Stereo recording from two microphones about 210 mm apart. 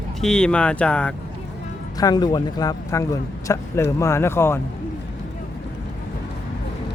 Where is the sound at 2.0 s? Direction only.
20° left (ahead or behind).